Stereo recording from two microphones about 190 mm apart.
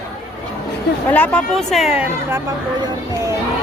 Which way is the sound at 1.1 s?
5° left (ahead or behind).